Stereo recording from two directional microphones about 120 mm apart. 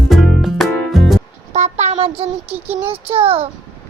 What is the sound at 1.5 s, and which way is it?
A child's voice, 65° right (ahead or behind).